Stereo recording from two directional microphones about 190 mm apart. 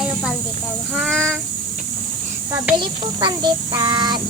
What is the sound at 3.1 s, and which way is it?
Child singing, 25° right (ahead or behind).